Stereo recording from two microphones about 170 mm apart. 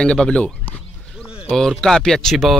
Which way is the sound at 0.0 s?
5° left (ahead or behind).